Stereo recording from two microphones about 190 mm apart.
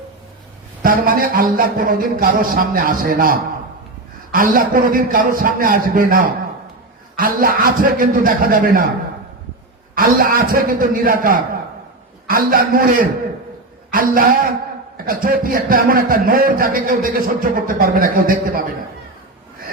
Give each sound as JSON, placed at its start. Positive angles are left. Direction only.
{"t": 0.8, "sound": "a man's voice", "side_deg": -50}
{"t": 9.9, "sound": "a man's voice", "side_deg": -50}